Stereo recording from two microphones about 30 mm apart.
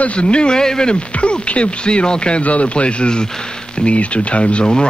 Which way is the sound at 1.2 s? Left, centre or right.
Left.